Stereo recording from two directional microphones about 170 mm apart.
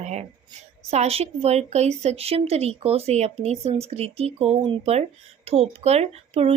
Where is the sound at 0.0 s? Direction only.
40° right (ahead or behind).